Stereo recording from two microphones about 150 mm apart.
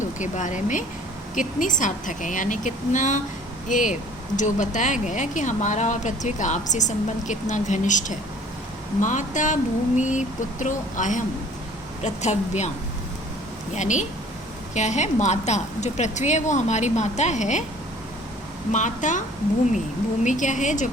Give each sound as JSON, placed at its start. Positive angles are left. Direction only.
{"t": 0.0, "sound": "a woman's voice", "side_deg": 55}
{"t": 13.7, "sound": "a woman's voice", "side_deg": 55}
{"t": 18.7, "sound": "a woman's voice", "side_deg": 55}
{"t": 20.2, "sound": "a woman's voice", "side_deg": 55}